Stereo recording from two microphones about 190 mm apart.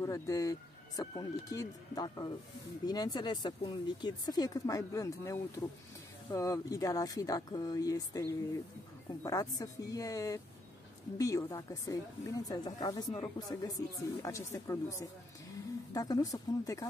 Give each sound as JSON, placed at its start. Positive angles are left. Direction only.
{"t": 0.0, "sound": "speech", "side_deg": 15}